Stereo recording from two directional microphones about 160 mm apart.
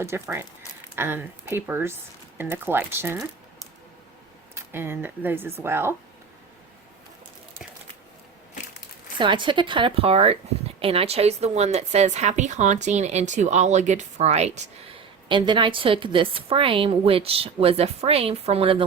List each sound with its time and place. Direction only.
0.0 s speech: 15° right (ahead or behind)
4.5 s speech: 15° right (ahead or behind)
9.1 s a woman's voice: 30° right (ahead or behind)
15.3 s a woman's voice: 30° right (ahead or behind)